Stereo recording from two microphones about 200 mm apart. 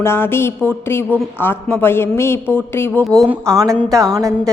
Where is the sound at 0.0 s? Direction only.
10° left (ahead or behind).